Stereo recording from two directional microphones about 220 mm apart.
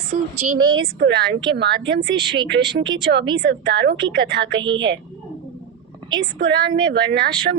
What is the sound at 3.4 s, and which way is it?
A woman's voice, 50° right (ahead or behind).